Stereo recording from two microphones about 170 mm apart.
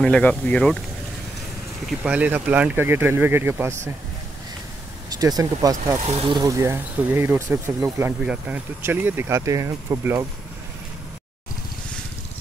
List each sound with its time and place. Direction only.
0.0 s speech: 5° left (ahead or behind)
1.9 s speech: 5° right (ahead or behind)
5.1 s speech: 20° right (ahead or behind)
5.9 s speech: 40° right (ahead or behind)
6.3 s speech: 20° right (ahead or behind)